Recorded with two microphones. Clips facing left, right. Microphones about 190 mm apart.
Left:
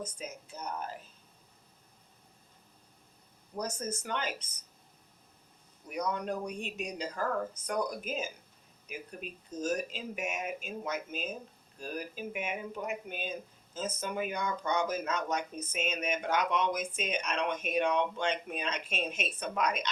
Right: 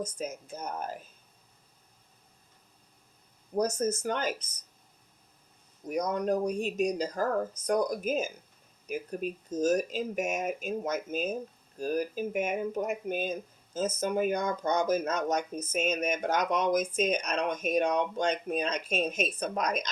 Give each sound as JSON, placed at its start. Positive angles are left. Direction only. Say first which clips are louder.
{"t": 0.0, "sound": "speech", "louder": "right 6 dB", "side_deg": -45}
{"t": 3.5, "sound": "speech", "louder": "right 9 dB", "side_deg": -45}
{"t": 5.9, "sound": "speech", "louder": "right 6 dB", "side_deg": -45}